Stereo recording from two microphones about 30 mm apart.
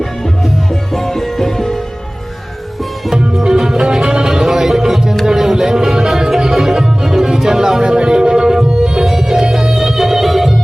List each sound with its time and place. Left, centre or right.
0.9 s music: centre
3.4 s music: right
9.0 s music: centre